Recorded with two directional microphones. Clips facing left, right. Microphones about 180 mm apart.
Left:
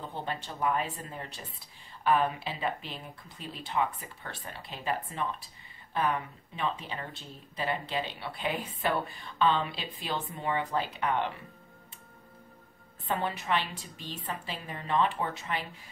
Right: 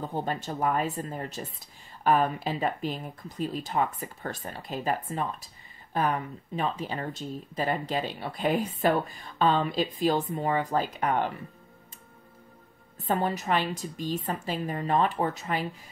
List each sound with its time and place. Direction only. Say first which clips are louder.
0.1 s speech: right 6 dB; 45° right (ahead or behind)
13.0 s a woman's voice: right 5 dB; 40° right (ahead or behind)